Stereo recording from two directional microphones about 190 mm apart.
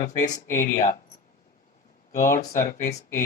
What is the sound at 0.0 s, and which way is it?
Speech, 40° left (ahead or behind).